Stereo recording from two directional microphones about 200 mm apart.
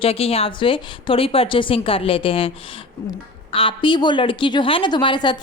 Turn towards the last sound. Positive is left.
turn(degrees=20)  # may be behind; listen again after turning